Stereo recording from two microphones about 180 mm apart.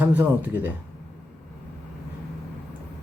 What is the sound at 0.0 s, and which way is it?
Speech, 10° right (ahead or behind).